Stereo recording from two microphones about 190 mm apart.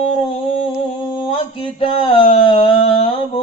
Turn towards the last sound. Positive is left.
turn(degrees=35)  # may be behind; listen again after turning